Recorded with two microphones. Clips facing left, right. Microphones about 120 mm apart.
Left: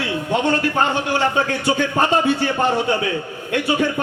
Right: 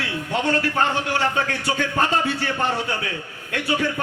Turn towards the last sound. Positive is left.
turn(degrees=20)  # may be behind; listen again after turning